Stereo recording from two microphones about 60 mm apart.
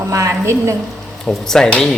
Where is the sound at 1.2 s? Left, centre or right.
Centre.